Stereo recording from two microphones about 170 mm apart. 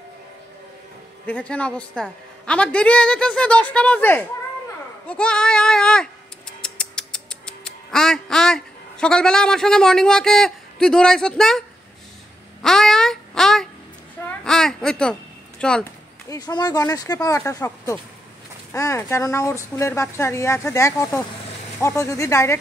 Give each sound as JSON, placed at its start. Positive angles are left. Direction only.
{"t": 1.2, "sound": "a woman's voice", "side_deg": 10}
{"t": 12.6, "sound": "a sound", "side_deg": 0}
{"t": 15.6, "sound": "speech", "side_deg": 5}
{"t": 16.3, "sound": "a woman's voice", "side_deg": 25}